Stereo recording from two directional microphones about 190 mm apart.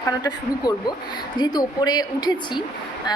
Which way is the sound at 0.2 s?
20° left (ahead or behind).